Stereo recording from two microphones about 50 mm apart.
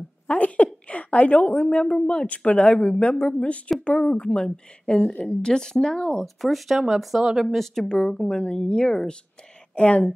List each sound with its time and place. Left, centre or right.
0.4 s a woman's voice: left
3.4 s a woman's voice: left
6.2 s speech: centre
7.4 s a woman's voice: centre
7.8 s a woman's voice: centre
9.8 s speech: left